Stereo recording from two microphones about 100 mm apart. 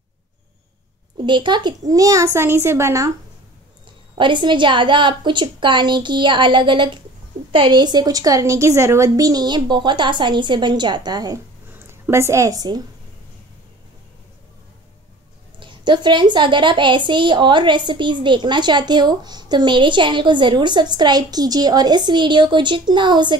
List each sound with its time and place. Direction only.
1.1 s speech: 50° right (ahead or behind)
1.9 s a child's voice: 35° right (ahead or behind)
4.1 s a woman's voice: 55° right (ahead or behind)
11.7 s a woman's voice: 25° right (ahead or behind)
15.6 s a woman's voice: 50° right (ahead or behind)